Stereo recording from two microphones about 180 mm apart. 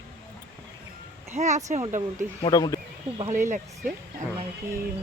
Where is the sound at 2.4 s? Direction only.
20° left (ahead or behind).